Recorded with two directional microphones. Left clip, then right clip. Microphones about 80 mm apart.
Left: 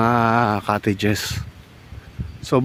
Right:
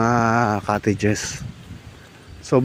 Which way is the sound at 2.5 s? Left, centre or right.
Left.